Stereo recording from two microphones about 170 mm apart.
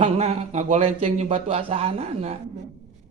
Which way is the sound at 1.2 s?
30° right (ahead or behind).